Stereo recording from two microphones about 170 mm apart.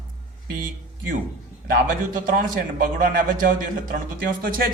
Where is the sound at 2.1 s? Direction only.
55° right (ahead or behind).